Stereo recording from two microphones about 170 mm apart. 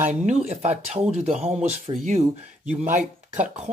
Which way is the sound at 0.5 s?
40° right (ahead or behind).